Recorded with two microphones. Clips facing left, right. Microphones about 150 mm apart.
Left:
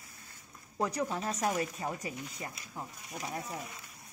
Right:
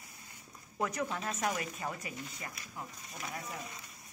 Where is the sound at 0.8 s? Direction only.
30° left (ahead or behind).